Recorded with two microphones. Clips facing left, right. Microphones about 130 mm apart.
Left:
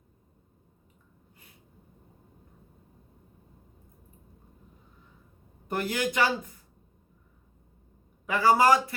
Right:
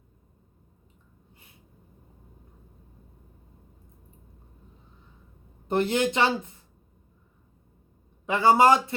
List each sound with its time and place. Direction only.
5.6 s a woman's voice: 25° right (ahead or behind)
8.3 s a woman's voice: 25° right (ahead or behind)